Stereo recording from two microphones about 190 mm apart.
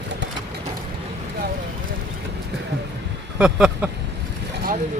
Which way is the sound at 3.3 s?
5° right (ahead or behind).